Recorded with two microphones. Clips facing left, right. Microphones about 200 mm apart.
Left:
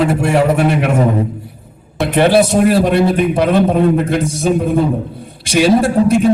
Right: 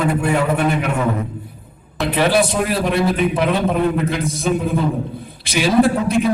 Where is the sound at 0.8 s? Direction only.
40° left (ahead or behind).